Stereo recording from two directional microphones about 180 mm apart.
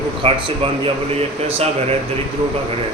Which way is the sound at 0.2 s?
30° right (ahead or behind).